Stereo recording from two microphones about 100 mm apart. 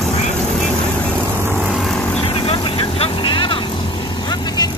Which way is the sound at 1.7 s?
5° left (ahead or behind).